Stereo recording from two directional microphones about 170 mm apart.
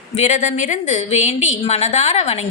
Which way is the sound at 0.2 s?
45° left (ahead or behind).